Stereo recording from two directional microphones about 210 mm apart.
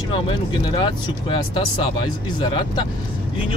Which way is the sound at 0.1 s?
25° left (ahead or behind).